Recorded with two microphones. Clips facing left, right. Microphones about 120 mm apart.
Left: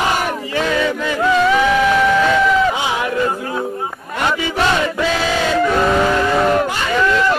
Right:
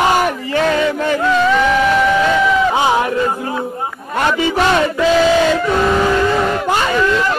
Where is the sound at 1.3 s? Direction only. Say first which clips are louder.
Left 1 dB; centre (ahead or behind).